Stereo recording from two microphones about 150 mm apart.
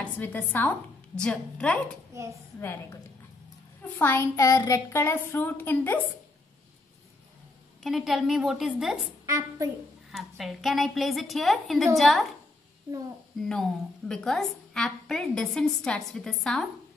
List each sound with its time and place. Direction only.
0.0 s a woman's voice: 10° left (ahead or behind)
3.8 s a child's voice: 15° left (ahead or behind)
7.8 s a woman's voice: centre (ahead or behind)
9.2 s a woman's voice: 20° right (ahead or behind)
10.1 s a woman's voice: centre (ahead or behind)
13.4 s a woman's voice: 5° left (ahead or behind)